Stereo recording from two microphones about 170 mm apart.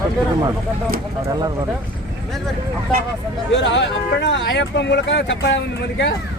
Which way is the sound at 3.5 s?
90° left.